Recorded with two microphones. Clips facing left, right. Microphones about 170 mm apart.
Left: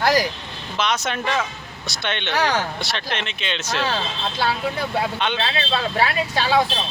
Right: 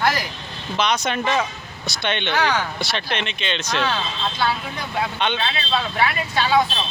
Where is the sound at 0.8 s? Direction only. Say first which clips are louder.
Right 2 dB; centre (ahead or behind).